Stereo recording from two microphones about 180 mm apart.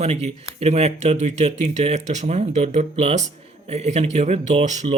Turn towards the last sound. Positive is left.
turn(degrees=-40)  # may be behind; listen again after turning